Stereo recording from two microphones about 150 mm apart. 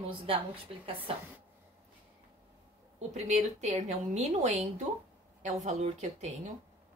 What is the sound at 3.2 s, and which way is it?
A woman's voice, 50° right (ahead or behind).